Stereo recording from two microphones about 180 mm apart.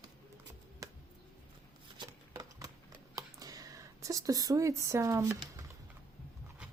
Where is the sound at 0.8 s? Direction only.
20° right (ahead or behind).